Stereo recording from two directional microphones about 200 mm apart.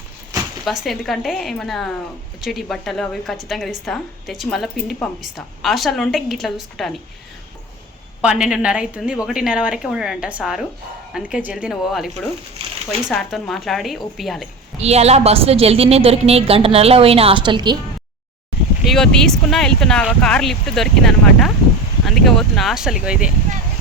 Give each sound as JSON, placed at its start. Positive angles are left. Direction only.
{"t": 0.6, "sound": "speech", "side_deg": 0}
{"t": 8.2, "sound": "speech", "side_deg": -5}
{"t": 14.8, "sound": "a woman's voice", "side_deg": -30}
{"t": 18.9, "sound": "speech", "side_deg": 0}